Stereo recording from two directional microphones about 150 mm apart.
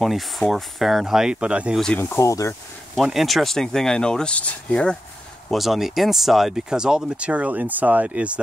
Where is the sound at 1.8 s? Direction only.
10° left (ahead or behind).